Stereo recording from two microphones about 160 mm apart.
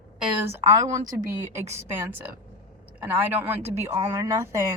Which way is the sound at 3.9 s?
20° right (ahead or behind).